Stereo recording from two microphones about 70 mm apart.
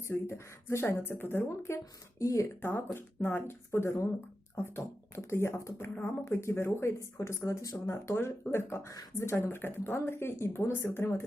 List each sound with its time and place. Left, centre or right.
0.1 s speech: left
2.6 s speech: left
5.9 s speech: centre
6.2 s speech: left
8.0 s speech: left